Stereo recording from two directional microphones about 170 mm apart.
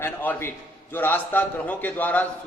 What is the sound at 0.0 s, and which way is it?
A man's voice, 10° left (ahead or behind).